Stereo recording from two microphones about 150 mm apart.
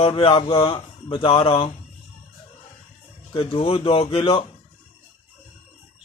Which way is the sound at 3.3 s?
40° left (ahead or behind).